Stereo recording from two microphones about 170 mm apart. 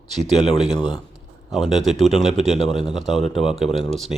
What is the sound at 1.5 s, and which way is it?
A man's voice, centre (ahead or behind).